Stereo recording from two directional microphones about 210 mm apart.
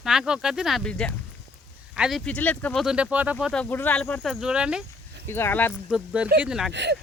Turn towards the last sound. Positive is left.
turn(degrees=-55)  # may be behind; listen again after turning